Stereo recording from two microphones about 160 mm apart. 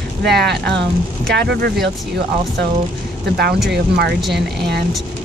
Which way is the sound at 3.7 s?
85° right.